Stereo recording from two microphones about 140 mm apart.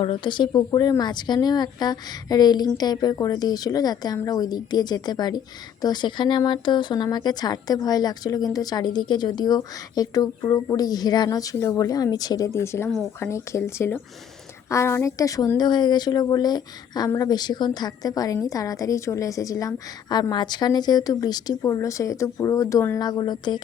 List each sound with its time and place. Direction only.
0.0 s speech: 35° left (ahead or behind)